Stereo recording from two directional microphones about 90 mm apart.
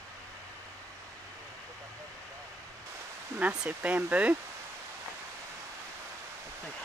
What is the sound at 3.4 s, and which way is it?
Speech, 10° right (ahead or behind).